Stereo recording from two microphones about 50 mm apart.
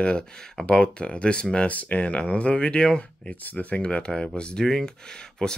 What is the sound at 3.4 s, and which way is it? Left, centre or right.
Speech, left.